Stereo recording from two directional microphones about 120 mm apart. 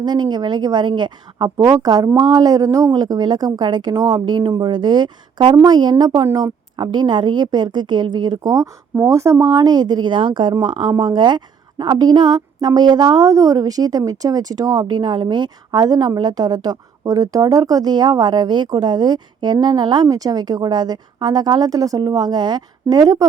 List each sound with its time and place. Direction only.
0.0 s a woman's voice: 40° right (ahead or behind)
1.5 s a woman's voice: 25° right (ahead or behind)